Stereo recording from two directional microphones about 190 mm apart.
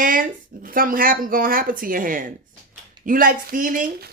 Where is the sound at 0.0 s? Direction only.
45° right (ahead or behind).